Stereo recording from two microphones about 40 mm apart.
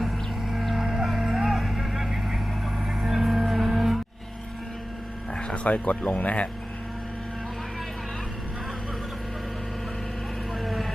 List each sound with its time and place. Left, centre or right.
0.6 s a sound: centre
1.0 s vehicle: centre
2.8 s music: centre
5.3 s a sound: centre
5.6 s speech: left
10.6 s vehicle: centre